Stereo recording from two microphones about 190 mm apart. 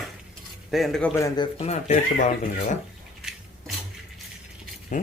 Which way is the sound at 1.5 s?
35° left (ahead or behind).